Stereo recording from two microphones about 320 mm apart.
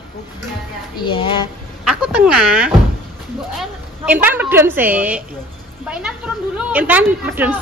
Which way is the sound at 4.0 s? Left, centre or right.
Centre.